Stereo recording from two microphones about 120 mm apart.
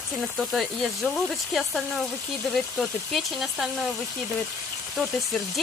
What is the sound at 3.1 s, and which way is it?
Speech, centre (ahead or behind).